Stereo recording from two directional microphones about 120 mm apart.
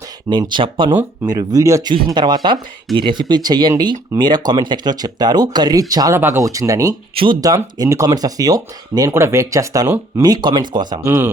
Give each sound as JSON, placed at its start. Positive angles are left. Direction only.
{"t": 0.3, "sound": "speech", "side_deg": -40}
{"t": 1.3, "sound": "speech", "side_deg": -30}
{"t": 2.1, "sound": "speech", "side_deg": -35}
{"t": 6.1, "sound": "speech", "side_deg": -20}
{"t": 11.0, "sound": "speech", "side_deg": -20}